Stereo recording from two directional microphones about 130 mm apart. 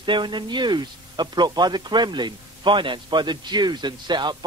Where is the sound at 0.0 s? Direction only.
35° right (ahead or behind).